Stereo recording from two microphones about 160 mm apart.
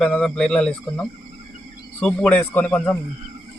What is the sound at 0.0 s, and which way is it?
Speech, 5° left (ahead or behind).